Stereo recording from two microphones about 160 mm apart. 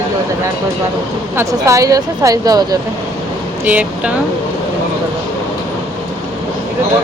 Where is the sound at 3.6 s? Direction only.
10° right (ahead or behind).